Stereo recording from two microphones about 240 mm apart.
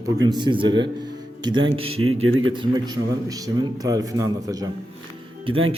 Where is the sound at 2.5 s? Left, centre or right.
Centre.